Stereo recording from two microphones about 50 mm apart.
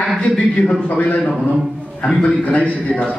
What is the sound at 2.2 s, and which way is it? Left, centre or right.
Speech, left.